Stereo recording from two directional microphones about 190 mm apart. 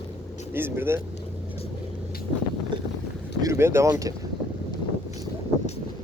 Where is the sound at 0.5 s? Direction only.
10° right (ahead or behind).